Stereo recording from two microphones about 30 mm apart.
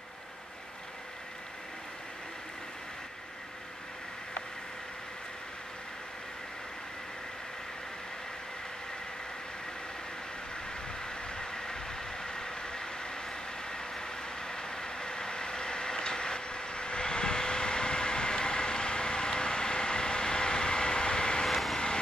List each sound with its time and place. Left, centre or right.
10.5 s vehicle: left
21.5 s vehicle: centre